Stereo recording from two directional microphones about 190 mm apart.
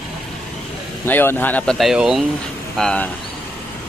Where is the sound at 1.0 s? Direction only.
10° left (ahead or behind).